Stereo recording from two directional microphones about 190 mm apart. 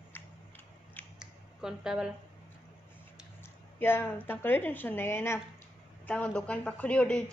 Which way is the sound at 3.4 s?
10° left (ahead or behind).